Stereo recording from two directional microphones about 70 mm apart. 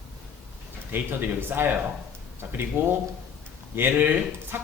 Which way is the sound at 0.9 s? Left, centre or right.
Right.